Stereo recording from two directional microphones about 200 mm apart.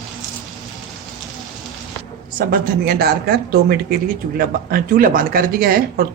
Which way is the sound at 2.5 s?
50° right (ahead or behind).